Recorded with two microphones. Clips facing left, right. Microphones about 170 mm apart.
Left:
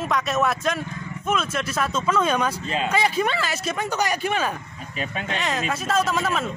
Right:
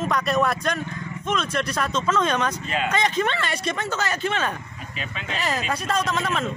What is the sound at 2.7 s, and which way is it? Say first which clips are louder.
Speech: even; 35° left (ahead or behind).